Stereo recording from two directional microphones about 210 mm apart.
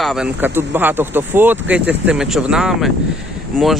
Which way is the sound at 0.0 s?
Centre (ahead or behind).